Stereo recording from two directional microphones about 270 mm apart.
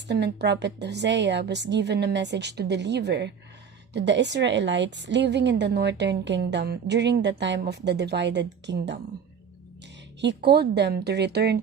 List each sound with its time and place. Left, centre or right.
0.1 s a woman's voice: right
10.2 s a woman's voice: right